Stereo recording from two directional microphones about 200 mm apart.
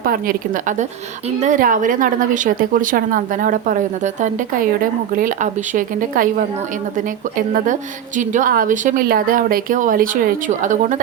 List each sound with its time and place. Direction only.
0.0 s a woman's voice: 45° right (ahead or behind)